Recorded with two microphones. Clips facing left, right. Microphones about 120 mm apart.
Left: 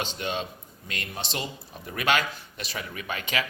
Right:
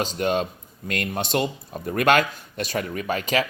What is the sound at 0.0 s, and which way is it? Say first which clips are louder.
A man's voice: right 8 dB; 45° right (ahead or behind).